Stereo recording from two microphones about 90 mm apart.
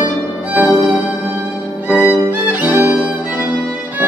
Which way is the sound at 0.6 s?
5° right (ahead or behind).